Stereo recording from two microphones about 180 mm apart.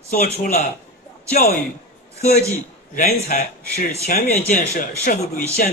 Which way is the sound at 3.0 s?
55° left (ahead or behind).